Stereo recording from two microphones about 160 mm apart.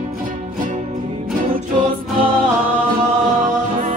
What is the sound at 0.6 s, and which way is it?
Music, 55° right (ahead or behind).